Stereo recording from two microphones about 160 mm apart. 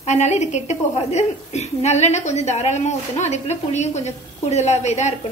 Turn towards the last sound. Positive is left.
turn(degrees=45)  # may be behind; listen again after turning